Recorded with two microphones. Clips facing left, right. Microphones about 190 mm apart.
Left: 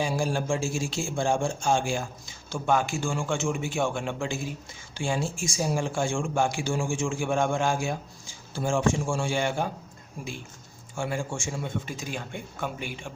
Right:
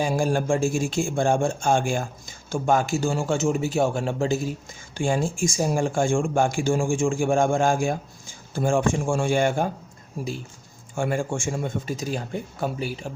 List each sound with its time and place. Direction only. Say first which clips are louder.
0.0 s speech: right 4 dB; 50° right (ahead or behind)
4.9 s speech: right 5 dB; 50° right (ahead or behind)
10.9 s speech: right 5 dB; 55° right (ahead or behind); by 13.1 s 35° right (ahead or behind)